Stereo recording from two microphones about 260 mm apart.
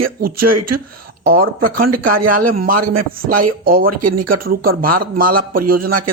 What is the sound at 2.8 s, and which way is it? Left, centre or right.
Speech, right.